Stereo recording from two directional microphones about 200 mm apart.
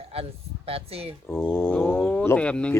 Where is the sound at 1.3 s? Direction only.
10° left (ahead or behind).